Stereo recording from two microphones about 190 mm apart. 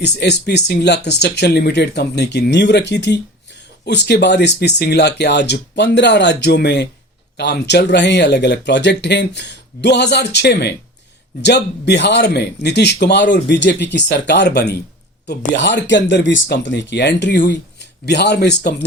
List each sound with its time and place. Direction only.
0.0 s speech: 60° left (ahead or behind)